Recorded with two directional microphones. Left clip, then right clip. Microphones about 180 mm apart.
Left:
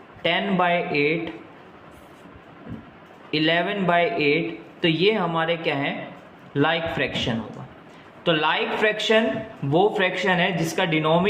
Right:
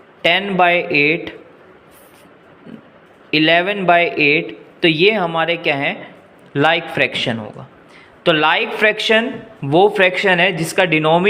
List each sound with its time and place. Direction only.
0.2 s speech: 35° right (ahead or behind)
3.2 s speech: 35° right (ahead or behind)